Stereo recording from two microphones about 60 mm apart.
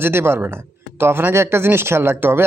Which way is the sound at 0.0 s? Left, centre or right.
Right.